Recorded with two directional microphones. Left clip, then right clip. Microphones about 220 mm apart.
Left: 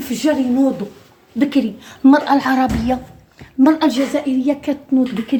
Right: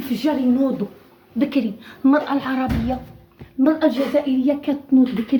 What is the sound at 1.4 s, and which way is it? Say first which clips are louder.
A woman's voice: left 4 dB; 50° left (ahead or behind).